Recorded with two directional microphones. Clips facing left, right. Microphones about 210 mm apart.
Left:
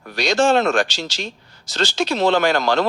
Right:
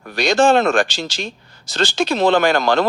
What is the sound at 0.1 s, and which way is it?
Speech, 55° right (ahead or behind).